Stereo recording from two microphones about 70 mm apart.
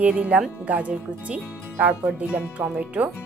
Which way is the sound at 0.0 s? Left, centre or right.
Centre.